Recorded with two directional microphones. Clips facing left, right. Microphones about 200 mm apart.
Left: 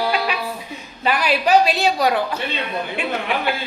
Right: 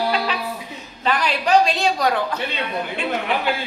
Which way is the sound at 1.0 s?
10° left (ahead or behind).